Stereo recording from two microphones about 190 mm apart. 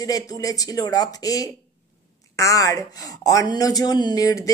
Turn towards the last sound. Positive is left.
turn(degrees=20)  # may be behind; listen again after turning